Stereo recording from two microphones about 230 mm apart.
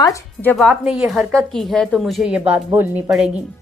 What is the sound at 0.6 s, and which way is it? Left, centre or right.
A woman's voice, centre.